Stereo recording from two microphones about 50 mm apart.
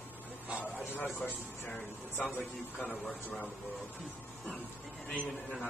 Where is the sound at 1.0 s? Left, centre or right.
Left.